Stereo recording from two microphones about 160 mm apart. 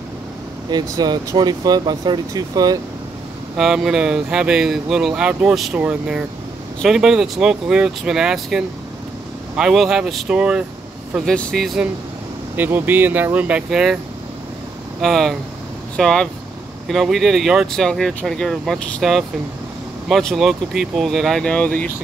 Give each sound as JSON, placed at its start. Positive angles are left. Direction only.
{"t": 0.7, "sound": "speech", "side_deg": -25}
{"t": 3.5, "sound": "speech", "side_deg": -5}
{"t": 11.2, "sound": "speech", "side_deg": 5}
{"t": 12.5, "sound": "speech", "side_deg": -10}
{"t": 15.0, "sound": "speech", "side_deg": 0}